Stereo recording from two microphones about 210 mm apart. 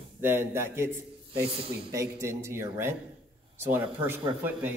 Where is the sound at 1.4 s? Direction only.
25° right (ahead or behind).